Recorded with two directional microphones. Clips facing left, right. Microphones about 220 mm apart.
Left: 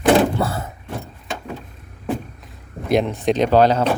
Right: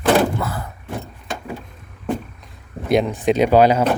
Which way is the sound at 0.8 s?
Centre (ahead or behind).